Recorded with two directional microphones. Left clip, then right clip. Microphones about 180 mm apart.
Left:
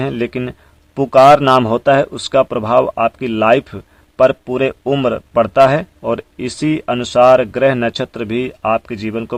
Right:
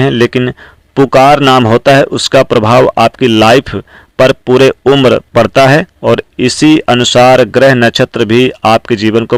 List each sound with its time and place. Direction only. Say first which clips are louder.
0.0 s speech: right 10 dB; 30° right (ahead or behind)
1.0 s speech: right 2 dB; 35° right (ahead or behind)